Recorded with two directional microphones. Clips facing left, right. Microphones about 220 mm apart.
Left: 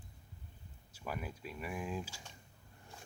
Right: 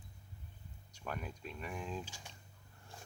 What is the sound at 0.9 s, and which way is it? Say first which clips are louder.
Speech: left 1 dB; 5° left (ahead or behind).